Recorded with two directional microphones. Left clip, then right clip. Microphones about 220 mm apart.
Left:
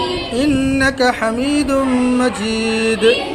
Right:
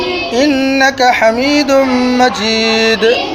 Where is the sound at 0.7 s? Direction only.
20° left (ahead or behind).